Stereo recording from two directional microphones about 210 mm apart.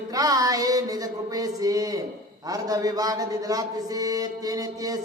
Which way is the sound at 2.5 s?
15° right (ahead or behind).